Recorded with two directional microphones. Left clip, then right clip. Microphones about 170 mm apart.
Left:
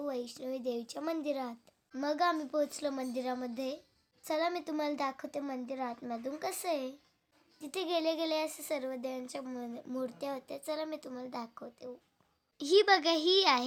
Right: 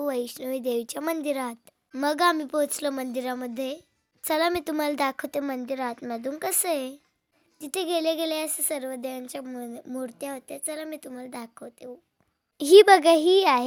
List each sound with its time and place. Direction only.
0.0 s a child's voice: 50° right (ahead or behind); by 11.9 s 35° right (ahead or behind)
12.5 s a child's voice: 55° right (ahead or behind)